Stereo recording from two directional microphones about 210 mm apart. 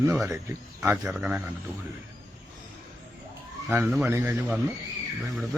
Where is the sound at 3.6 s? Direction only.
5° right (ahead or behind).